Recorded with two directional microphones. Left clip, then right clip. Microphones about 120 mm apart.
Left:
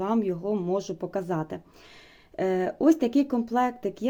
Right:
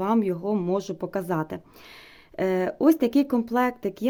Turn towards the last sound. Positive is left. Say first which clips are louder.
# right 1 dB
turn(degrees=-25)  # may be behind; listen again after turning